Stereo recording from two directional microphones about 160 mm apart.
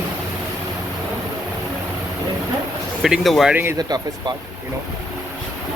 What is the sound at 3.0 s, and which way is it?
Speech, centre (ahead or behind).